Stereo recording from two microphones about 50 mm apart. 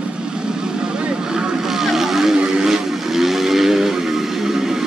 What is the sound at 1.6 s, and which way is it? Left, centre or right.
Vehicle, centre.